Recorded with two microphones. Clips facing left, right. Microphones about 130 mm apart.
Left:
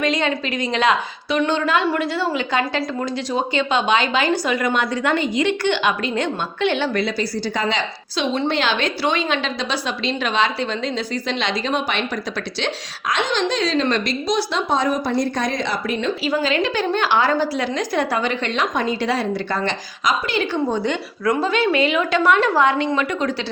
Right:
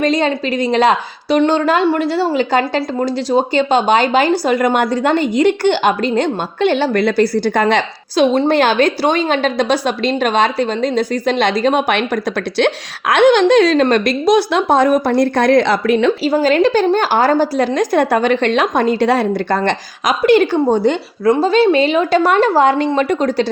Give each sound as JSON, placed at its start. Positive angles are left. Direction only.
{"t": 0.0, "sound": "a woman's voice", "side_deg": -35}
{"t": 6.9, "sound": "a woman's voice", "side_deg": -55}
{"t": 16.2, "sound": "a woman's voice", "side_deg": -40}